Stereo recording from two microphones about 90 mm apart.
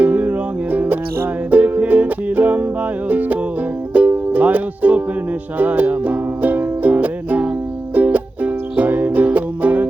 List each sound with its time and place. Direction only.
0.0 s music: 20° right (ahead or behind)